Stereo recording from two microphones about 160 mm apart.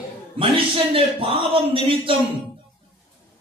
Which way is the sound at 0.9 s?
35° right (ahead or behind).